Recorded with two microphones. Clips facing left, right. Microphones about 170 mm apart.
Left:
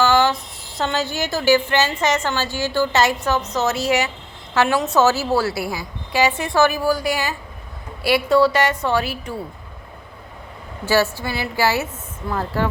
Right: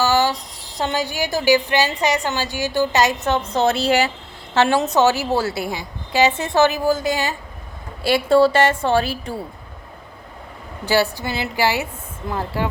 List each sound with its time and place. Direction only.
0.1 s a sound: 10° right (ahead or behind)
0.8 s a woman's voice: 15° right (ahead or behind)
3.2 s a woman's voice: 30° right (ahead or behind)
4.9 s a woman's voice: 15° right (ahead or behind)
10.8 s a woman's voice: 15° right (ahead or behind)